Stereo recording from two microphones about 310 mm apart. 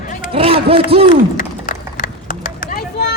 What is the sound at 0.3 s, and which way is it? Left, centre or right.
Speech, centre.